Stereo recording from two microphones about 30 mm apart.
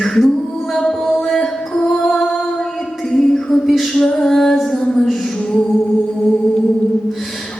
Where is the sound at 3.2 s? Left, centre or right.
Centre.